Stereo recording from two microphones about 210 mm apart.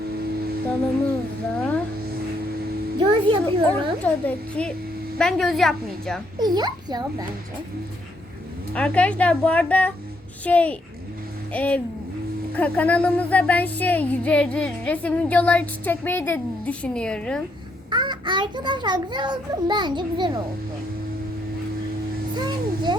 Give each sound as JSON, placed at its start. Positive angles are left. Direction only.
{"t": 3.0, "sound": "a child's voice", "side_deg": -25}
{"t": 3.4, "sound": "music", "side_deg": 10}
{"t": 5.1, "sound": "speech", "side_deg": 0}
{"t": 6.4, "sound": "a child's voice", "side_deg": -20}
{"t": 8.7, "sound": "speech", "side_deg": 5}
{"t": 10.4, "sound": "music", "side_deg": 5}
{"t": 17.9, "sound": "a child's voice", "side_deg": -20}
{"t": 22.4, "sound": "a child's voice", "side_deg": -20}